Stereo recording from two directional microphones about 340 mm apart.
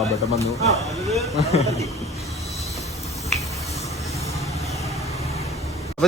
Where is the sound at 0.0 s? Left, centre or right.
Centre.